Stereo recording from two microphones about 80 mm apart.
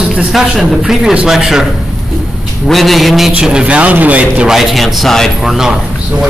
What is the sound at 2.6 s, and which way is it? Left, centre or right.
Speech, centre.